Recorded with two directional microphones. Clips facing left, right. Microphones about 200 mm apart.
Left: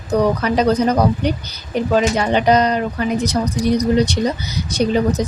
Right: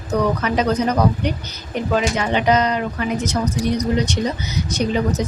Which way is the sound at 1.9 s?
35° left (ahead or behind).